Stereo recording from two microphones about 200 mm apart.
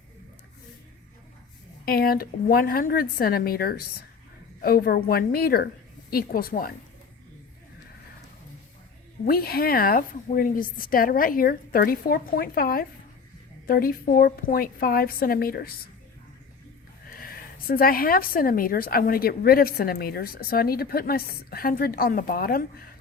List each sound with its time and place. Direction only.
1.8 s a woman's voice: 50° left (ahead or behind)
9.2 s a woman's voice: 50° left (ahead or behind)
17.2 s a woman's voice: 45° left (ahead or behind)